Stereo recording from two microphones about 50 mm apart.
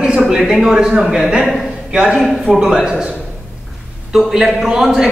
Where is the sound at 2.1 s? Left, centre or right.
Centre.